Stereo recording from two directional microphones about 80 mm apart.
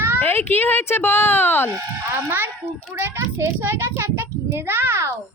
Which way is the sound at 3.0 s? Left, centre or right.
Right.